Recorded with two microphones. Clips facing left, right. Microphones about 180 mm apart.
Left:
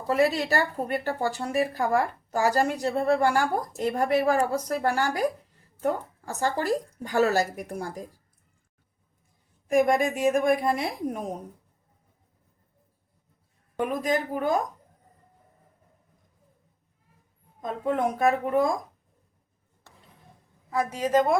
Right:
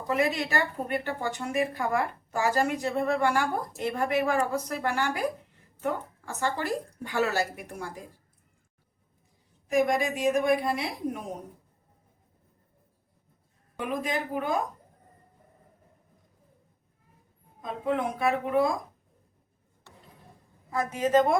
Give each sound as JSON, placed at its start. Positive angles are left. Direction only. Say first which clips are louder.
{"t": 0.1, "sound": "a woman's voice", "louder": "left 4 dB", "side_deg": 35}
{"t": 9.6, "sound": "a woman's voice", "louder": "left 3 dB", "side_deg": 50}
{"t": 13.7, "sound": "a woman's voice", "louder": "left 4 dB", "side_deg": 40}
{"t": 17.6, "sound": "a woman's voice", "louder": "left 3 dB", "side_deg": 45}
{"t": 20.7, "sound": "a woman's voice", "louder": "even", "side_deg": 10}